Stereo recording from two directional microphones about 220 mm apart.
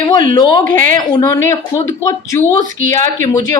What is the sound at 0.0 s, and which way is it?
A woman's voice, 15° left (ahead or behind).